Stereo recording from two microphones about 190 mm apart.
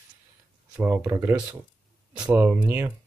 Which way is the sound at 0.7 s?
10° right (ahead or behind).